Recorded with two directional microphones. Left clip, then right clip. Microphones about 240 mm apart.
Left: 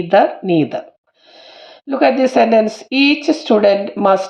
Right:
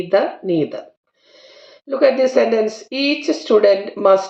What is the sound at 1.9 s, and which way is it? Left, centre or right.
Speech, left.